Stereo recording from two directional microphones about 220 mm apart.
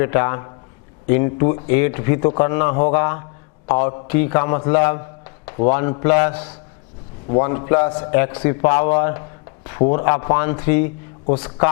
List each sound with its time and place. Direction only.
0.0 s speech: 15° left (ahead or behind)